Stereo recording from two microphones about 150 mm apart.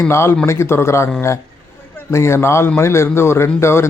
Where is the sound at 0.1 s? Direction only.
15° left (ahead or behind).